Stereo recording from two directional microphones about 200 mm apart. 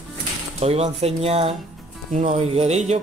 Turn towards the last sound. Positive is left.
turn(degrees=-35)  # may be behind; listen again after turning